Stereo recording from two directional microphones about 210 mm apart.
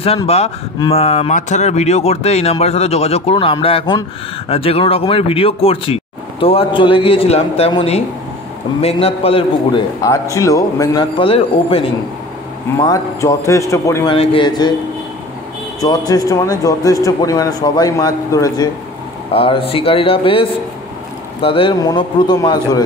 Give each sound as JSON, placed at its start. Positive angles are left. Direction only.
{"t": 0.0, "sound": "a man's voice", "side_deg": 25}
{"t": 10.3, "sound": "a man's voice", "side_deg": 15}
{"t": 12.8, "sound": "a man's voice", "side_deg": 15}
{"t": 14.1, "sound": "a man's voice", "side_deg": 25}
{"t": 15.8, "sound": "a man's voice", "side_deg": 15}